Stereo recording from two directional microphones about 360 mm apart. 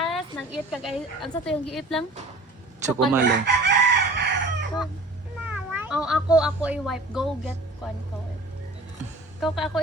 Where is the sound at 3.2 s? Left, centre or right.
Right.